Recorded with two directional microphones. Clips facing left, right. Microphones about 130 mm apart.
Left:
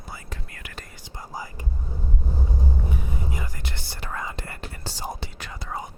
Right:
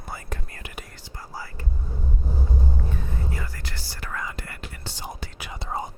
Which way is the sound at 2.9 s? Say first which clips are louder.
Left 1 dB; 15° left (ahead or behind).